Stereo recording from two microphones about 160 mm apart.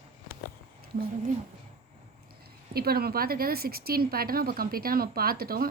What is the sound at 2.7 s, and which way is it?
Speech, 70° right (ahead or behind).